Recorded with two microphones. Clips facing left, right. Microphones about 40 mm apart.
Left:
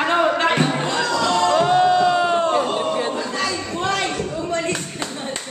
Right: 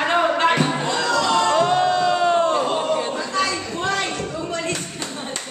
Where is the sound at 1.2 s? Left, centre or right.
Centre.